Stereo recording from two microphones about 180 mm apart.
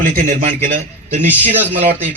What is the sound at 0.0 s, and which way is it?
A man's voice, 45° right (ahead or behind).